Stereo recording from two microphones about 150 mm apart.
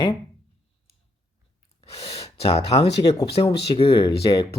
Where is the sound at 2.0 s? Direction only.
40° left (ahead or behind).